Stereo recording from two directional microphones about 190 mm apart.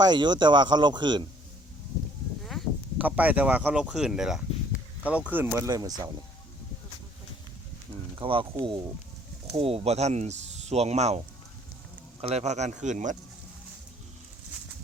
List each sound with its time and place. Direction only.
0.0 s speech: 25° right (ahead or behind)
2.4 s speech: centre (ahead or behind); by 6.1 s 20° right (ahead or behind)
8.1 s speech: 25° right (ahead or behind)
12.2 s speech: 35° right (ahead or behind)